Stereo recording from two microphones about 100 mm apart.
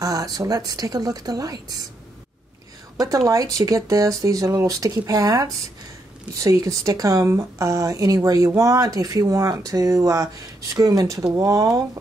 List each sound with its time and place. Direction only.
0.0 s speech: 35° right (ahead or behind)
3.0 s speech: 35° right (ahead or behind)